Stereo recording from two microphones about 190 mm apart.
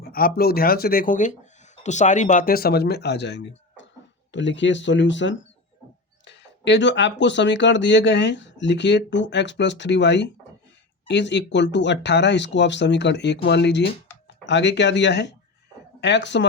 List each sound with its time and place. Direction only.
0.0 s speech: 50° left (ahead or behind); by 16.5 s 70° left (ahead or behind)